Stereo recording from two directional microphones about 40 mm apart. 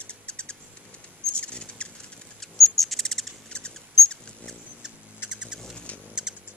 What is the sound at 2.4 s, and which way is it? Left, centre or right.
Bird, centre.